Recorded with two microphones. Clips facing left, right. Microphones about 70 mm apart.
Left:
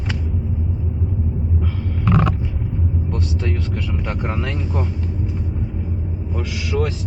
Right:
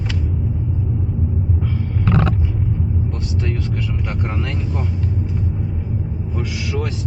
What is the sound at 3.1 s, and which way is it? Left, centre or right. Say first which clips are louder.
Speech: even; centre.